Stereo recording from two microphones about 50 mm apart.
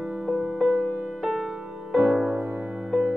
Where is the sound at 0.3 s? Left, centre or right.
Centre.